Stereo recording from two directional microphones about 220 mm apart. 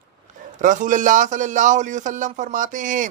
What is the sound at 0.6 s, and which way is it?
Speech, 35° right (ahead or behind).